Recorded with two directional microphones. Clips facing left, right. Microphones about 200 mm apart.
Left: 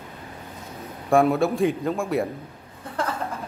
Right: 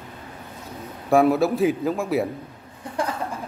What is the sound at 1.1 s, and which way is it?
A man's voice, centre (ahead or behind).